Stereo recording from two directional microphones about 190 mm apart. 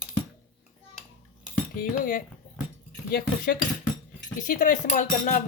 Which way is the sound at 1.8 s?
45° left (ahead or behind).